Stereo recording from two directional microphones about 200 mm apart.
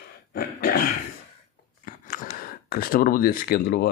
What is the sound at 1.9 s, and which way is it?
Speech, 45° left (ahead or behind).